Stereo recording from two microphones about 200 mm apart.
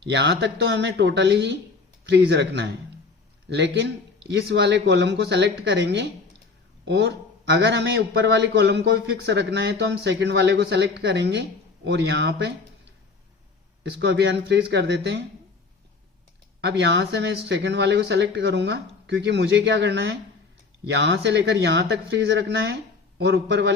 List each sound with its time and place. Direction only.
0.0 s a man's voice: 60° right (ahead or behind)
14.0 s a man's voice: 60° right (ahead or behind)
16.6 s a man's voice: 60° right (ahead or behind)